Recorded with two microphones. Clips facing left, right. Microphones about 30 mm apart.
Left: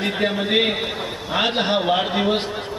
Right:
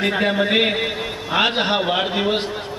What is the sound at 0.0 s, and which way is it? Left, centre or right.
A man's voice, centre.